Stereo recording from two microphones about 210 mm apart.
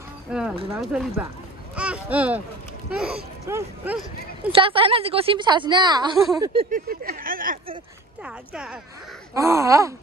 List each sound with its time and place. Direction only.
0.3 s a sound: 5° right (ahead or behind)
0.7 s speech: 5° right (ahead or behind)
4.5 s a woman's voice: 25° right (ahead or behind)
6.1 s speech: centre (ahead or behind)
6.4 s a woman's voice: 25° right (ahead or behind)
6.7 s speech: 40° right (ahead or behind)
8.2 s speech: 5° right (ahead or behind)